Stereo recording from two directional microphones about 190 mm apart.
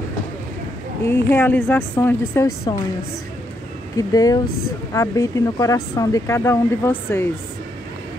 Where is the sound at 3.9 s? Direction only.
20° left (ahead or behind).